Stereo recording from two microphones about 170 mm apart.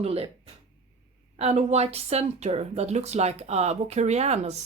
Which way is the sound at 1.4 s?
40° right (ahead or behind).